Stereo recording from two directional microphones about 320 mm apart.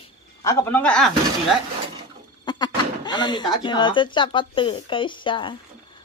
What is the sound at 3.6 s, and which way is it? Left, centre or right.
Speech, centre.